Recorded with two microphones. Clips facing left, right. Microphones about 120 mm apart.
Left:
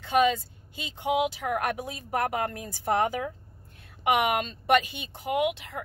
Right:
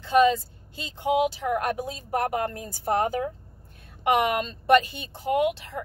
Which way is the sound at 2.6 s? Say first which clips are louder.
Left 1 dB; 35° right (ahead or behind).